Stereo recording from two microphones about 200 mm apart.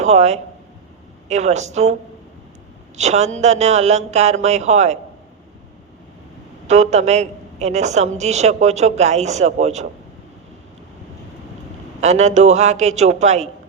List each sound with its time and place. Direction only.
0.0 s a man's voice: 35° right (ahead or behind)
6.7 s a man's voice: 35° right (ahead or behind)
11.9 s a man's voice: 35° right (ahead or behind)